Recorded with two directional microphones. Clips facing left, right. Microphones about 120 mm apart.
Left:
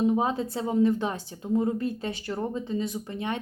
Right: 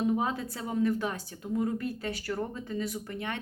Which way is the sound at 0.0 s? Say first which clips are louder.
Left 4 dB; 25° left (ahead or behind).